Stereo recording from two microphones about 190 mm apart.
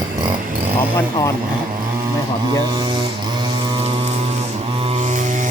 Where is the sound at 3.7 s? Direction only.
30° right (ahead or behind).